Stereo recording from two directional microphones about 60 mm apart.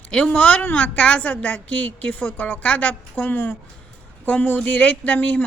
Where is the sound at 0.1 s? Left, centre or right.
Centre.